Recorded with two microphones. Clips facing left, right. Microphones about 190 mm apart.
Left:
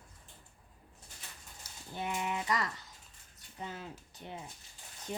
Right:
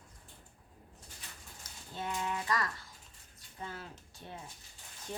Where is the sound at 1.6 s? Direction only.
15° left (ahead or behind).